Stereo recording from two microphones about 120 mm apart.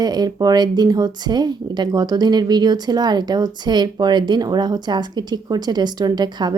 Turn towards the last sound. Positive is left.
turn(degrees=-35)  # may be behind; listen again after turning